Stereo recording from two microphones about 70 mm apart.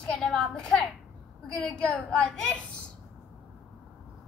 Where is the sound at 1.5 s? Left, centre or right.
Centre.